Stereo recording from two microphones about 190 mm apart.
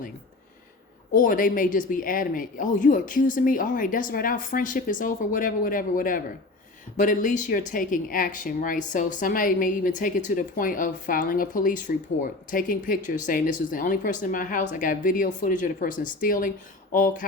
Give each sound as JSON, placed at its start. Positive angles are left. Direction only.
{"t": 1.1, "sound": "speech", "side_deg": 45}